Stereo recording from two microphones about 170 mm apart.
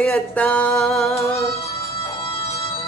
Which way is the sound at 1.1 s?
15° left (ahead or behind).